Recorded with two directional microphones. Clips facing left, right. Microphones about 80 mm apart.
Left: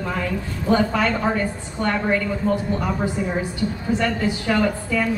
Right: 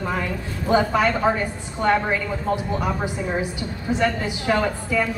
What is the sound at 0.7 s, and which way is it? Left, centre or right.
Speech, centre.